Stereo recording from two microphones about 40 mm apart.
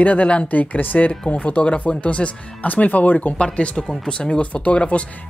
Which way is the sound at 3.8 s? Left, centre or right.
Centre.